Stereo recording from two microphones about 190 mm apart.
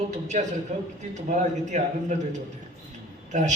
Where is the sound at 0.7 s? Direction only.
35° right (ahead or behind).